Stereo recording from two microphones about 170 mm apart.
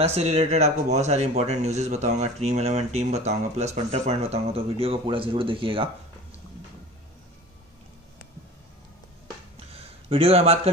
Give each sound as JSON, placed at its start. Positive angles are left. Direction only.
{"t": 0.0, "sound": "speech", "side_deg": -40}
{"t": 10.0, "sound": "speech", "side_deg": -35}